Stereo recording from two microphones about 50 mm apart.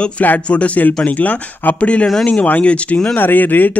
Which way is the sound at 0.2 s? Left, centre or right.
Left.